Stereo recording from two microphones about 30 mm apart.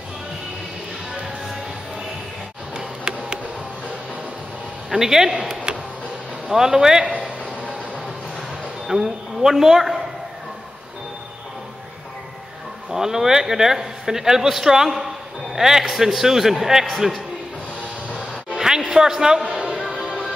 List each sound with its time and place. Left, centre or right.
2.7 s a sound: centre
4.9 s a man's voice: centre
8.8 s a sound: centre
12.9 s speech: centre
15.5 s music: centre
15.9 s speech: centre
18.6 s music: centre
18.9 s speech: centre